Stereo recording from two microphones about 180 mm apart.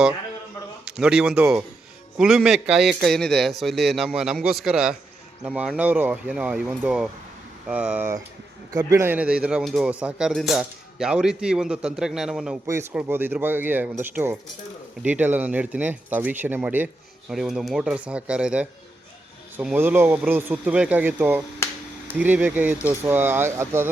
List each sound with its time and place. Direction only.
0.9 s speech: 5° right (ahead or behind)
12.6 s speech: 15° right (ahead or behind)